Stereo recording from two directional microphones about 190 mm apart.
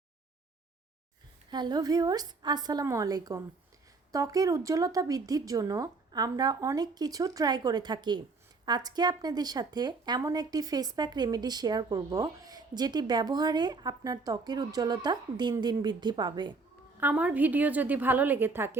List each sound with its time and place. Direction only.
1.5 s speech: 25° right (ahead or behind)
17.0 s a woman's voice: 10° right (ahead or behind)